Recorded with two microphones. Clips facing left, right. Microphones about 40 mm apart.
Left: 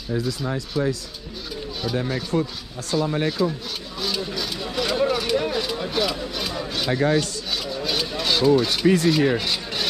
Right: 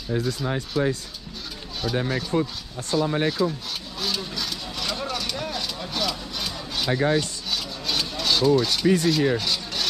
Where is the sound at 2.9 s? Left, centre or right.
Centre.